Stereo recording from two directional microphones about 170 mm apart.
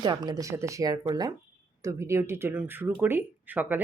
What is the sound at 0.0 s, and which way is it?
Speech, 25° right (ahead or behind).